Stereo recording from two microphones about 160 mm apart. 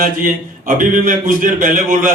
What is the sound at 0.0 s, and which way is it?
A man's voice, 60° right (ahead or behind).